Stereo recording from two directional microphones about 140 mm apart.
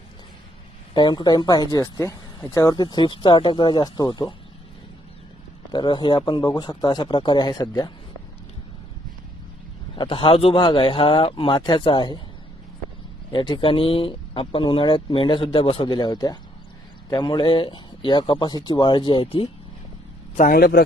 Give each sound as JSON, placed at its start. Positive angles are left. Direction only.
{"t": 0.9, "sound": "speech", "side_deg": 30}
{"t": 5.7, "sound": "speech", "side_deg": 35}
{"t": 9.9, "sound": "speech", "side_deg": 40}
{"t": 13.3, "sound": "speech", "side_deg": 35}
{"t": 20.4, "sound": "speech", "side_deg": 90}